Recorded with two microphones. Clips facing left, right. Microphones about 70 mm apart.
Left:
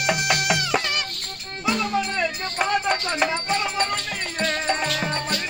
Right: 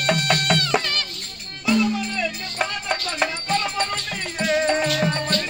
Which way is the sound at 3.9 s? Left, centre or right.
Centre.